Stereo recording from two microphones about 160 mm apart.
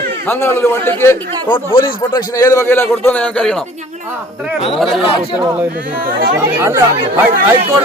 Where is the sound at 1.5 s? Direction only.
30° left (ahead or behind).